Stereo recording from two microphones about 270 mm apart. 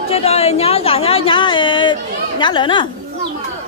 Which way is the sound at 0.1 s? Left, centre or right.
Left.